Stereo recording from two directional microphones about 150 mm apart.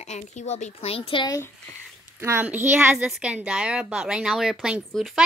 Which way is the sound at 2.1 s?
15° right (ahead or behind).